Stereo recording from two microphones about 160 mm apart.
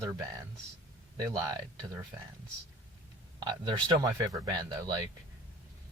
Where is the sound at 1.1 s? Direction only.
25° right (ahead or behind).